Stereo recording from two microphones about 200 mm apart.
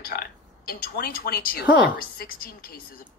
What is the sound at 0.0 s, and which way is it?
A woman's voice, 50° left (ahead or behind).